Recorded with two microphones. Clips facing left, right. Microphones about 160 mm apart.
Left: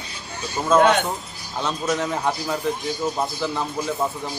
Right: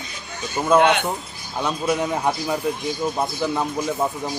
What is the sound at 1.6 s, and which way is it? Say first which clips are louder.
Speech: right 2 dB; 15° right (ahead or behind).